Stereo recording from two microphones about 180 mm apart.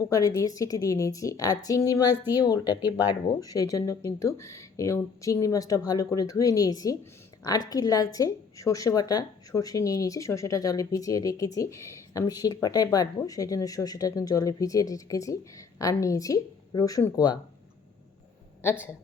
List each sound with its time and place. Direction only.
0.0 s speech: 20° left (ahead or behind)